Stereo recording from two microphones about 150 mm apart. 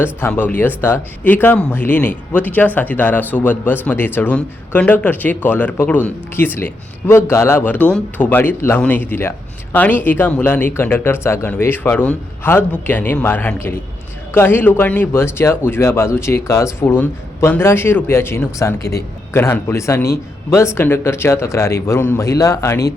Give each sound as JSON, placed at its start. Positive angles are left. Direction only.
{"t": 0.0, "sound": "speech", "side_deg": 15}